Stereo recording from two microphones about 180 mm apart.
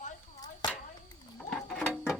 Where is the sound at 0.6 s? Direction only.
25° left (ahead or behind).